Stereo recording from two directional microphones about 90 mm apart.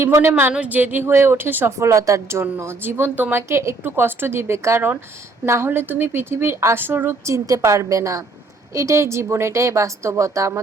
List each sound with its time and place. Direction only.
0.0 s speech: 30° right (ahead or behind)
0.5 s speech: 15° right (ahead or behind); by 10.6 s 35° right (ahead or behind)